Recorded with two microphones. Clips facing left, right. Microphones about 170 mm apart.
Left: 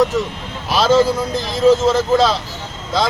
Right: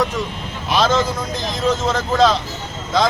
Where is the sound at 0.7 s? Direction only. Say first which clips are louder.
Left 2 dB; centre (ahead or behind).